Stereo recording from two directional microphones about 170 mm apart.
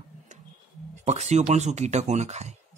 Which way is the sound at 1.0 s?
40° right (ahead or behind).